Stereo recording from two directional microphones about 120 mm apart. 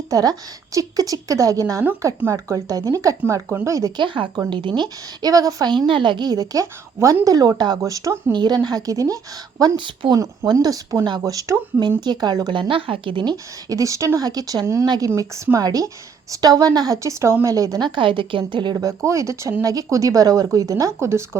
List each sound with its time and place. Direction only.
0.1 s speech: 30° right (ahead or behind)
3.9 s a woman's voice: 45° right (ahead or behind); by 8.2 s 25° right (ahead or behind)
8.3 s a woman's voice: 35° right (ahead or behind)
13.3 s speech: 30° right (ahead or behind)